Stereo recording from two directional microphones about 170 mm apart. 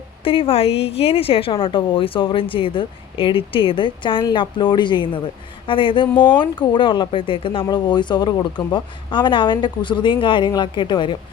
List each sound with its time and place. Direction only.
0.3 s a woman's voice: 35° left (ahead or behind)